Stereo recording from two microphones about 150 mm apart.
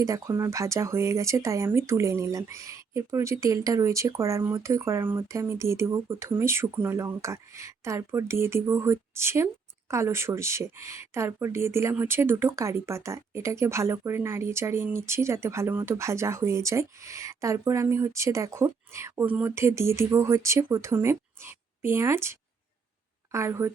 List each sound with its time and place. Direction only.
0.0 s speech: 20° right (ahead or behind)